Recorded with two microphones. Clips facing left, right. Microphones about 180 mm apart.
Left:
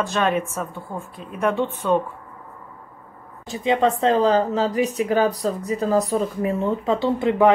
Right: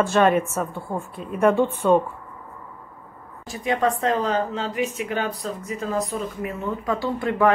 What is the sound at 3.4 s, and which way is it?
Speech, 25° left (ahead or behind).